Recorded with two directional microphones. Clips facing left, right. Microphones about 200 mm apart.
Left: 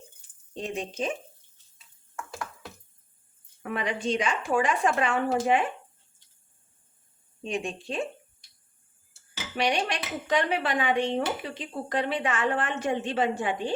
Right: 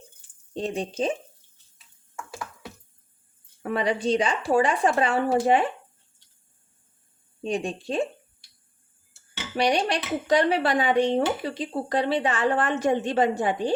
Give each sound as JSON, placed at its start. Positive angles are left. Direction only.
{"t": 0.5, "sound": "speech", "side_deg": -35}
{"t": 3.6, "sound": "speech", "side_deg": -35}
{"t": 7.4, "sound": "speech", "side_deg": -35}
{"t": 9.6, "sound": "speech", "side_deg": -35}